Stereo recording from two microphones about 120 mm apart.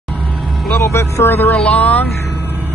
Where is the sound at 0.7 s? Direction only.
20° left (ahead or behind).